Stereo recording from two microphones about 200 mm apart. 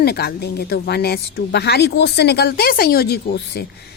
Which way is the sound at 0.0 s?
50° left (ahead or behind).